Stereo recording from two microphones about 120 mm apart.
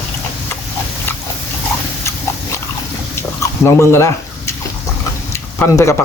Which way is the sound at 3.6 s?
25° left (ahead or behind).